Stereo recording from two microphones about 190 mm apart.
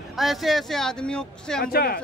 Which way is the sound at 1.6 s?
50° left (ahead or behind).